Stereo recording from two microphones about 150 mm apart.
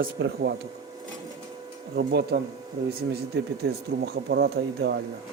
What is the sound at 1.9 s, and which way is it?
Speech, 90° right.